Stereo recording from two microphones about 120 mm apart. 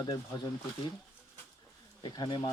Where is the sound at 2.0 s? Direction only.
35° left (ahead or behind).